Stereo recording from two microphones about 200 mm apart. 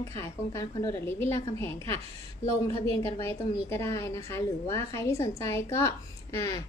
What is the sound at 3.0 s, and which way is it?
A woman's voice, 15° left (ahead or behind).